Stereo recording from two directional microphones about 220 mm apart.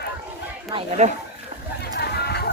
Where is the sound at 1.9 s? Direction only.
45° left (ahead or behind).